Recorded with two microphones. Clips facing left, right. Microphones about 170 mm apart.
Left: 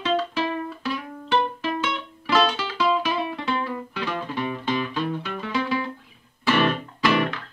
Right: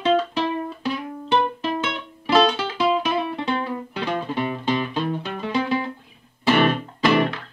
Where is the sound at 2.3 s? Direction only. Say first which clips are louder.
Right 4 dB; 25° right (ahead or behind).